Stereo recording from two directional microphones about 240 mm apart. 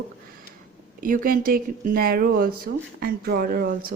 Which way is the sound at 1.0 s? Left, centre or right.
Right.